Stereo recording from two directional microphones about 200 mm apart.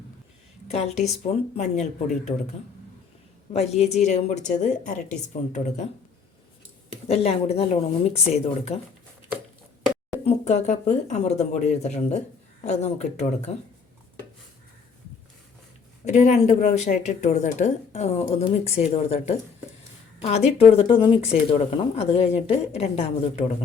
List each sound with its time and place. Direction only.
0.7 s speech: 30° left (ahead or behind)
3.5 s speech: 30° left (ahead or behind)
7.1 s speech: 30° left (ahead or behind)
10.2 s speech: 35° left (ahead or behind)
16.0 s speech: 35° left (ahead or behind)